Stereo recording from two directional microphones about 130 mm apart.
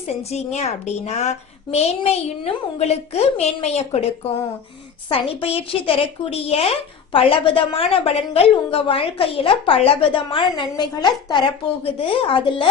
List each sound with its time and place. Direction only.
0.2 s a child's voice: 55° left (ahead or behind)